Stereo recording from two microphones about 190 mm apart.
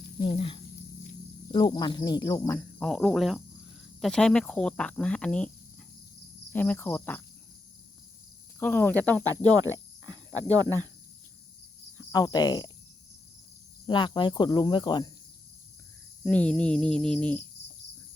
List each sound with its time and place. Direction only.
0.2 s speech: 25° left (ahead or behind); by 5.5 s 5° left (ahead or behind)
6.5 s speech: 10° left (ahead or behind)
8.5 s speech: 10° left (ahead or behind)
9.2 s speech: 20° right (ahead or behind)
11.9 s speech: 20° left (ahead or behind)
13.8 s speech: 25° left (ahead or behind)
16.2 s speech: 5° left (ahead or behind)